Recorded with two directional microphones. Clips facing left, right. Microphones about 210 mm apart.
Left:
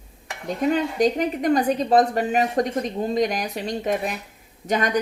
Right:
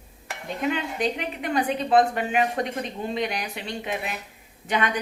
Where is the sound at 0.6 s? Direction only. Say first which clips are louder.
Left 6 dB; 40° left (ahead or behind).